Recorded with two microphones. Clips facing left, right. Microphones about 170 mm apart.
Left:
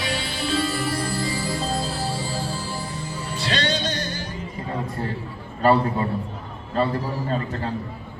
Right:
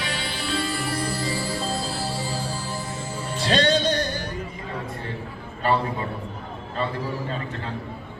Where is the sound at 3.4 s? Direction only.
45° right (ahead or behind).